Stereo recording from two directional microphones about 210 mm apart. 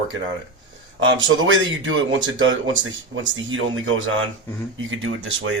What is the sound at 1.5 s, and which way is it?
Speech, 65° right (ahead or behind).